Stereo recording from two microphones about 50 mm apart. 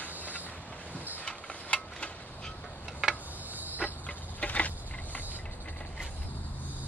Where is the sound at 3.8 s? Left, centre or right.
Centre.